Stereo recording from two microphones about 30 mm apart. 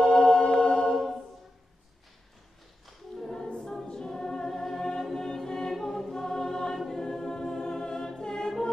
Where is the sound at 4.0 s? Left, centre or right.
Left.